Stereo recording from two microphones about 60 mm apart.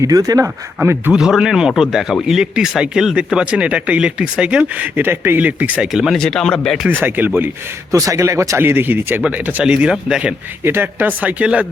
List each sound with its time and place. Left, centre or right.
0.0 s speech: right
0.4 s speech: right
1.4 s speech: centre
5.0 s speech: right
5.4 s speech: right
5.8 s speech: centre
6.1 s speech: centre
6.9 s speech: right
7.9 s a man's voice: right
8.5 s speech: right
9.6 s speech: centre
10.6 s speech: right
11.0 s speech: right